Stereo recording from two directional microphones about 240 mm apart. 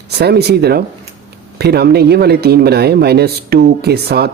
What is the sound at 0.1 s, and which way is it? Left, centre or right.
Speech, right.